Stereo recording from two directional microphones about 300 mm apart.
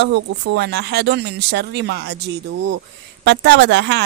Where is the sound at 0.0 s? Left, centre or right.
Right.